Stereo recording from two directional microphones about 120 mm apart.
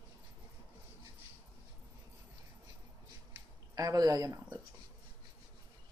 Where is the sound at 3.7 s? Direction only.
30° right (ahead or behind).